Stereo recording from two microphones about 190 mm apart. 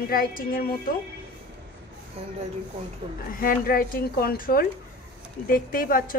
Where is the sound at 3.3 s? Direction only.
45° left (ahead or behind).